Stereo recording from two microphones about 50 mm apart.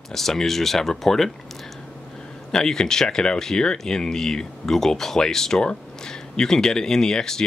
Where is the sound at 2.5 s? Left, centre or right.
Centre.